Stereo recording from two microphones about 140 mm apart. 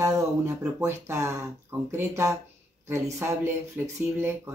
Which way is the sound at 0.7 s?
20° right (ahead or behind).